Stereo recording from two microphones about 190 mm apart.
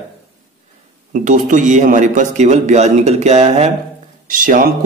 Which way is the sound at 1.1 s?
40° right (ahead or behind).